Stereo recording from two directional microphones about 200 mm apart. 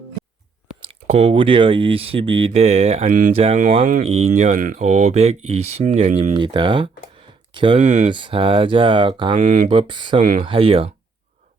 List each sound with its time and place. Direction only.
0.8 s speech: 30° right (ahead or behind)
3.1 s speech: 40° right (ahead or behind); by 7.8 s 25° right (ahead or behind)
7.8 s speech: 35° right (ahead or behind)
8.1 s speech: 25° right (ahead or behind)
9.4 s speech: 35° right (ahead or behind)
9.7 s speech: 25° right (ahead or behind)